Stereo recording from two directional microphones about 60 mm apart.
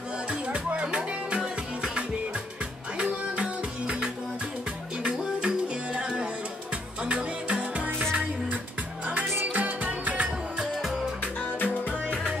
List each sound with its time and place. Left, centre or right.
0.3 s music: right
5.1 s music: centre
9.3 s music: right
9.6 s music: right
11.3 s music: left